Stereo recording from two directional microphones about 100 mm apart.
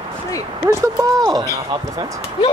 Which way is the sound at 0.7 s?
35° right (ahead or behind).